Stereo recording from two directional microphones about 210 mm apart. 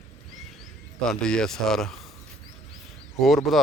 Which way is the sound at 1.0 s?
5° left (ahead or behind).